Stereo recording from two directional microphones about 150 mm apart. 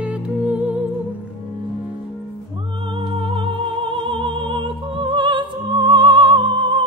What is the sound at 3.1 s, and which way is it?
Music, 35° right (ahead or behind).